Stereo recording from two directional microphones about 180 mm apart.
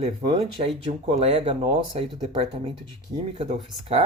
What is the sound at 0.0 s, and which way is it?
Speech, 30° right (ahead or behind).